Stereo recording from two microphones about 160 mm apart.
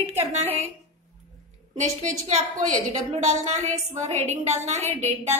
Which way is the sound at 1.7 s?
45° right (ahead or behind).